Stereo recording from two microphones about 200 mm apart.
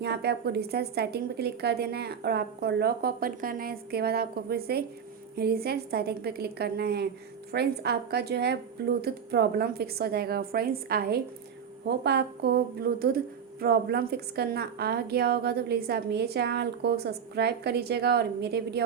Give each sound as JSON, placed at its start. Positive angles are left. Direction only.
{"t": 0.0, "sound": "speech", "side_deg": -55}